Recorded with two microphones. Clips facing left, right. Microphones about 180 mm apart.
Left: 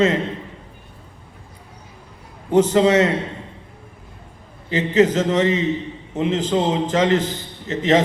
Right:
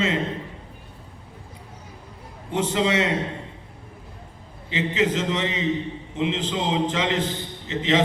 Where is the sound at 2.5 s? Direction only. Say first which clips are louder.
Left 8 dB; 40° left (ahead or behind).